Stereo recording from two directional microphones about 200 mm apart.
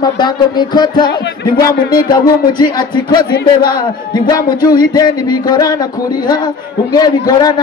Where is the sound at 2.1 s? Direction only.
20° left (ahead or behind).